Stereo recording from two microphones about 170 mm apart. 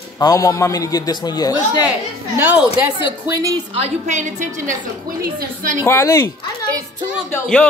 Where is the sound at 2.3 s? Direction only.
10° right (ahead or behind).